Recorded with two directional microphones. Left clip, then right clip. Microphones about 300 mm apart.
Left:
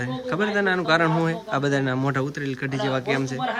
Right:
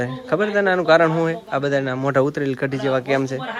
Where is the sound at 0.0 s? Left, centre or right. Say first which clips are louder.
Right 4 dB; centre.